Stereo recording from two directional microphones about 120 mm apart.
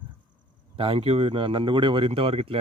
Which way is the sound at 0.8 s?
50° right (ahead or behind).